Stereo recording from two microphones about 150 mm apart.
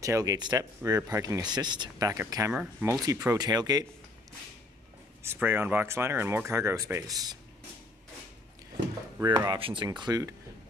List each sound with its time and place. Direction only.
0.0 s speech: 20° right (ahead or behind)
2.5 s speech: 10° right (ahead or behind)
2.9 s speech: 20° right (ahead or behind)
5.2 s speech: 15° right (ahead or behind)
9.2 s speech: 20° right (ahead or behind)
9.6 s speech: 35° right (ahead or behind)
9.8 s speech: 25° right (ahead or behind)